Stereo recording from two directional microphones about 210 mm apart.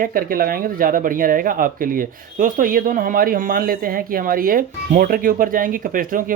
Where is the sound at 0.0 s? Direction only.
45° right (ahead or behind).